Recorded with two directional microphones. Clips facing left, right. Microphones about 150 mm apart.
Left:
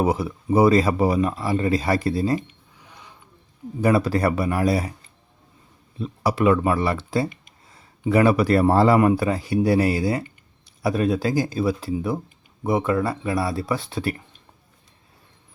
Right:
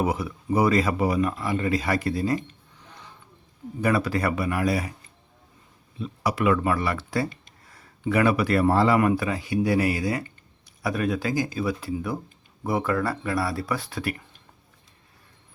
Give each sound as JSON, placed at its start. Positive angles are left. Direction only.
{"t": 0.0, "sound": "speech", "side_deg": 30}
{"t": 3.8, "sound": "speech", "side_deg": 30}
{"t": 6.0, "sound": "speech", "side_deg": 30}
{"t": 7.3, "sound": "a sound", "side_deg": 15}
{"t": 8.1, "sound": "speech", "side_deg": 30}